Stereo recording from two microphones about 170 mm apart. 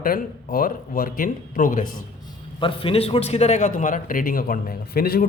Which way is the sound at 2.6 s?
30° left (ahead or behind).